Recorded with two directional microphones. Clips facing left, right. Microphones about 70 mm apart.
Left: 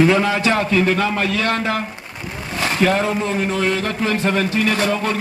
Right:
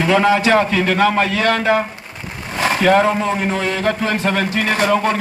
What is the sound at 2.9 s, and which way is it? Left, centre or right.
A man's voice, right.